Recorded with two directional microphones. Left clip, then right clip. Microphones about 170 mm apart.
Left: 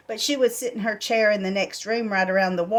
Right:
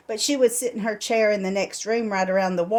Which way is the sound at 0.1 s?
35° right (ahead or behind).